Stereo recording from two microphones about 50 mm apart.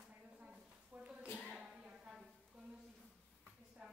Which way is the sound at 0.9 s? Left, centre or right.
Right.